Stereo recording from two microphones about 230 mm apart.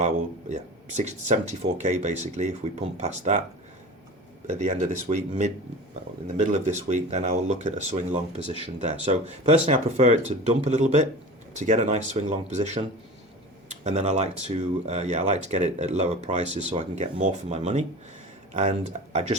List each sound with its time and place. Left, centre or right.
0.0 s speech: right
4.4 s speech: right
19.1 s speech: right